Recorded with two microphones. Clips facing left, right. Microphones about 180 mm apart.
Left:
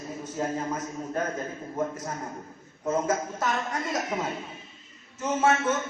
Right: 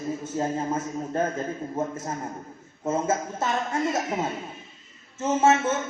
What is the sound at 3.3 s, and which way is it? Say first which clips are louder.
Speech: right 2 dB; 25° right (ahead or behind).